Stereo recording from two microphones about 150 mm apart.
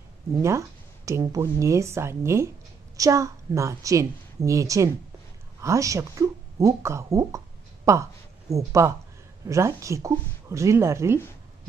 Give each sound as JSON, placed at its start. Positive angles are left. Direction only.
{"t": 0.4, "sound": "speech", "side_deg": -20}